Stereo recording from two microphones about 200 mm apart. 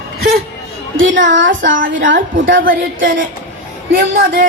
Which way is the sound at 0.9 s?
65° right (ahead or behind).